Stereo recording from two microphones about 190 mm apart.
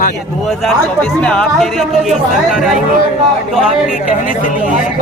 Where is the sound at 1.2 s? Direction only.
5° left (ahead or behind).